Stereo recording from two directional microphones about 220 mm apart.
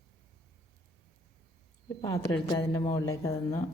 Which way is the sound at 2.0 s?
20° left (ahead or behind).